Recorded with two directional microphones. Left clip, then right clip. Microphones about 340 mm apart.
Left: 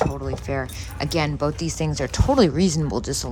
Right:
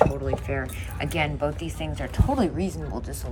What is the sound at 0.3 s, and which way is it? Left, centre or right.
Speech, centre.